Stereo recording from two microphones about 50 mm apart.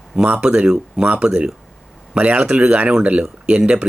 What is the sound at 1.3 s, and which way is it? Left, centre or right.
Speech, centre.